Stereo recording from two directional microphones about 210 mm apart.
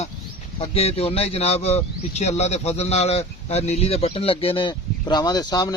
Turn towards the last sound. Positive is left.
turn(degrees=20)  # may be behind; listen again after turning